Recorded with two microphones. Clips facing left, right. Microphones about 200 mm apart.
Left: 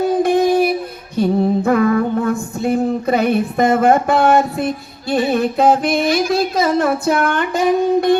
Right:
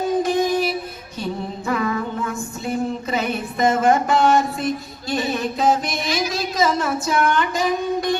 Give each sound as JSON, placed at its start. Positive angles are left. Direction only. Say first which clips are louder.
{"t": 0.2, "sound": "female singing", "louder": "left 7 dB", "side_deg": 55}
{"t": 5.1, "sound": "music", "louder": "left 7 dB", "side_deg": 55}